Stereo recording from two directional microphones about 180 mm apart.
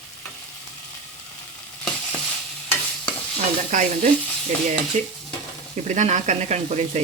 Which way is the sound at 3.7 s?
45° right (ahead or behind).